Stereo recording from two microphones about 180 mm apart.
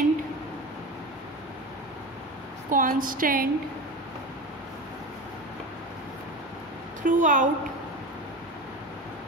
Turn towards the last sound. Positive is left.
turn(degrees=-45)  # may be behind; listen again after turning